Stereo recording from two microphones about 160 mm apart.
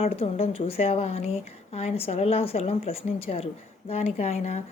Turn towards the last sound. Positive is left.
turn(degrees=45)  # may be behind; listen again after turning